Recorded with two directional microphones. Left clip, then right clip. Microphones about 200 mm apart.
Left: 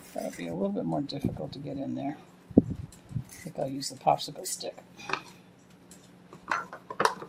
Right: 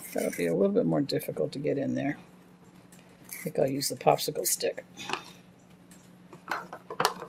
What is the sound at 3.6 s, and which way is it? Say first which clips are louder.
Speech: right 6 dB; 50° right (ahead or behind).